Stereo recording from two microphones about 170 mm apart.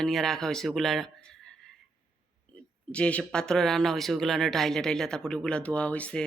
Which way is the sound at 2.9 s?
5° left (ahead or behind).